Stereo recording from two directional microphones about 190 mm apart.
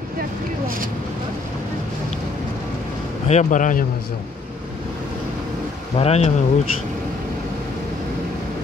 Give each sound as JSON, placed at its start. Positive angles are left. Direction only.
{"t": 3.3, "sound": "speech", "side_deg": 40}
{"t": 5.9, "sound": "speech", "side_deg": 35}